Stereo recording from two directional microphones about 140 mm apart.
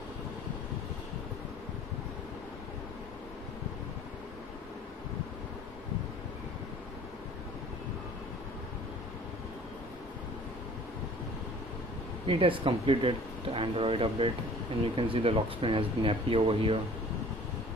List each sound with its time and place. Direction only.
12.3 s speech: 40° right (ahead or behind)